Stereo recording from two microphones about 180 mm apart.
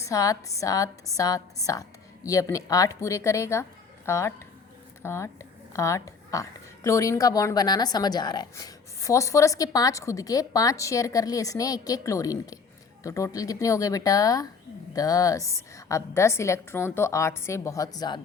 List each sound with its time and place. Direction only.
0.0 s a woman's voice: 20° left (ahead or behind)